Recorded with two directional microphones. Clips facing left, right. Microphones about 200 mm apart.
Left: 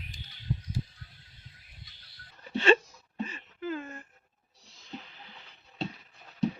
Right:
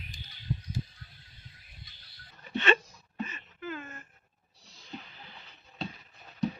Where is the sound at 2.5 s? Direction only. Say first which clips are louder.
Left 4 dB; 30° left (ahead or behind).